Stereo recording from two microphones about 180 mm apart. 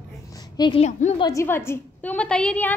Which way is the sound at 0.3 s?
20° left (ahead or behind).